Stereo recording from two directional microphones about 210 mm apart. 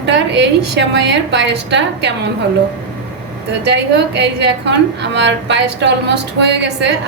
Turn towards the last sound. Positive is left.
turn(degrees=-55)  # may be behind; listen again after turning